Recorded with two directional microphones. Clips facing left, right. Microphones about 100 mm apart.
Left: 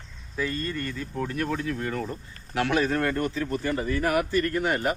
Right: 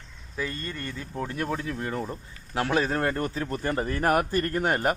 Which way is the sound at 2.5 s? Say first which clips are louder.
Left 1 dB; 30° right (ahead or behind).